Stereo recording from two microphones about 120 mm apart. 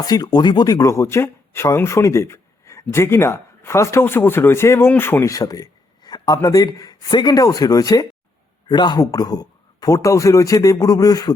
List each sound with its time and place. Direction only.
0.0 s speech: 35° left (ahead or behind)